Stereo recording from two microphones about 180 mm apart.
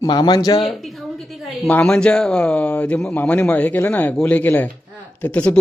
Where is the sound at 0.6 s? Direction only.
Centre (ahead or behind).